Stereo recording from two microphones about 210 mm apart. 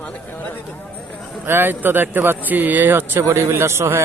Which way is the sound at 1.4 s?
10° right (ahead or behind).